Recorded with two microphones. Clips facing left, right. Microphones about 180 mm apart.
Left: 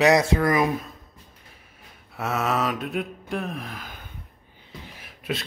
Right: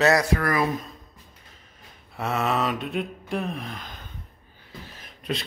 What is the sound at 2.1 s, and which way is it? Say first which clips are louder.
Gasp: even; centre (ahead or behind).